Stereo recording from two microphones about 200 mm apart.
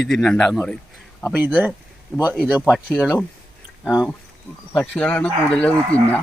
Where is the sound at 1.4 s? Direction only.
10° right (ahead or behind).